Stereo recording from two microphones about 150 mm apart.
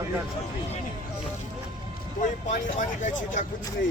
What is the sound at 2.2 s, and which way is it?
Speech, 55° left (ahead or behind).